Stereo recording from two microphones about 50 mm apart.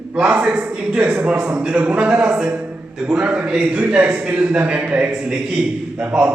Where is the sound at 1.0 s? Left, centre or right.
Right.